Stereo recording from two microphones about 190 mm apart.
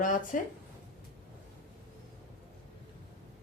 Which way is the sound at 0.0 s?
45° left (ahead or behind).